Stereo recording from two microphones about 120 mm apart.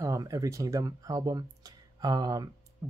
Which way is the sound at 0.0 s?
25° right (ahead or behind).